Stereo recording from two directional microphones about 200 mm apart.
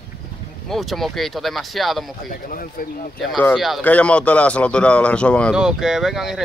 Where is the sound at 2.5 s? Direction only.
45° left (ahead or behind).